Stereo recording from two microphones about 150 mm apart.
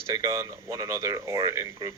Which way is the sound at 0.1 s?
25° right (ahead or behind).